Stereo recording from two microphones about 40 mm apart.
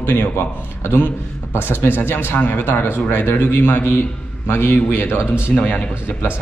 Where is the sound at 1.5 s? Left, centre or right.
Left.